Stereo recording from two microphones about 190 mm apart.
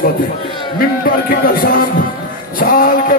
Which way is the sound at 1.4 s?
50° left (ahead or behind).